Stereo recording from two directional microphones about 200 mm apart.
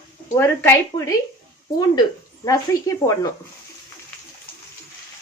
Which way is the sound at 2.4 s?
15° left (ahead or behind).